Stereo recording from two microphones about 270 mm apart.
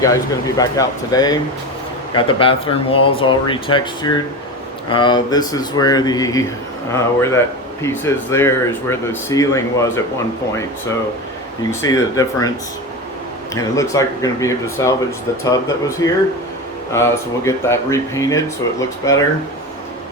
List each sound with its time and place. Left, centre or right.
0.0 s speech: centre
11.8 s speech: centre
13.5 s speech: centre
16.0 s speech: centre